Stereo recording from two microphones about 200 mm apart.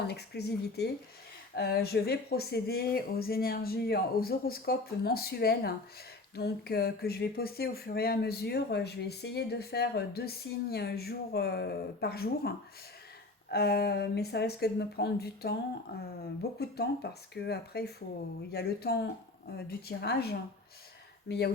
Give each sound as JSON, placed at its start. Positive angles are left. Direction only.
{"t": 0.1, "sound": "speech", "side_deg": 55}